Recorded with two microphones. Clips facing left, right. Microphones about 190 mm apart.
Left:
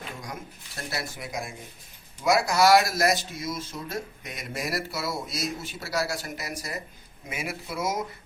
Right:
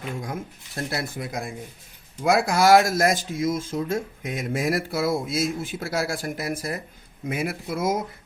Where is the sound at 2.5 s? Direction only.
50° right (ahead or behind).